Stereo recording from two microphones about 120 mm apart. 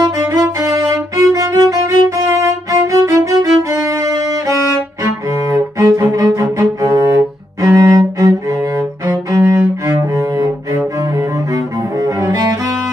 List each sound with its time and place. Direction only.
0.0 s music: 30° right (ahead or behind)
5.5 s cello: 25° right (ahead or behind)